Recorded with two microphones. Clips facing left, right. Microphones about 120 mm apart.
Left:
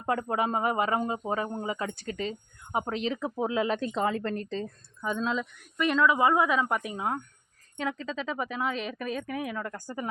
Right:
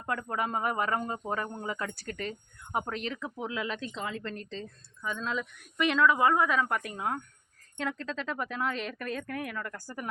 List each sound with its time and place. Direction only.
0.0 s speech: 25° left (ahead or behind); by 5.1 s 45° left (ahead or behind)
5.1 s speech: 25° left (ahead or behind)
5.9 s speech: 10° left (ahead or behind)